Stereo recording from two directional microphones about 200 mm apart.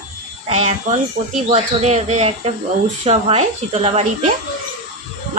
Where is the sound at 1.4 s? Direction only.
35° right (ahead or behind).